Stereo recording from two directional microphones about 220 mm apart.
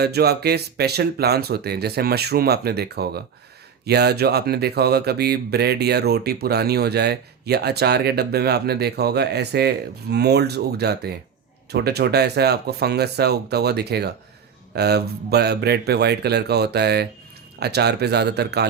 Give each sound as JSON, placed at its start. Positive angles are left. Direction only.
{"t": 0.0, "sound": "speech", "side_deg": -45}